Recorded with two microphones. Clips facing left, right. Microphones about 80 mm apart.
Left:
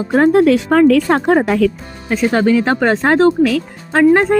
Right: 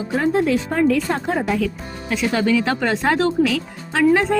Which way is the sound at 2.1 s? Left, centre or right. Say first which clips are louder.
Left 5 dB; left.